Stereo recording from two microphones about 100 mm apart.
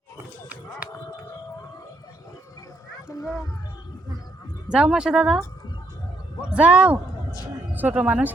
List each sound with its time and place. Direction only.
4.7 s speech: 5° right (ahead or behind)
6.5 s speech: 10° right (ahead or behind)